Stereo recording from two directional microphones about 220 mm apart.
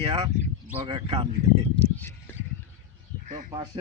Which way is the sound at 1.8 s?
10° left (ahead or behind).